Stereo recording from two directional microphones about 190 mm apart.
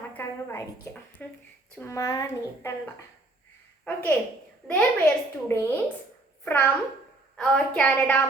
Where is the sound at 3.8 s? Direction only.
10° left (ahead or behind).